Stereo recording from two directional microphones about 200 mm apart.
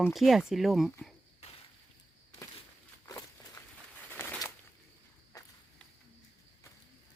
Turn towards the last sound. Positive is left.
turn(degrees=15)  # may be behind; listen again after turning